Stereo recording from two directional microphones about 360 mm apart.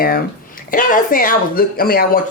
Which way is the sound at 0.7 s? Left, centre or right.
Left.